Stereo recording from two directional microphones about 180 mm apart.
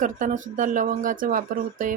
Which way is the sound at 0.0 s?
45° right (ahead or behind).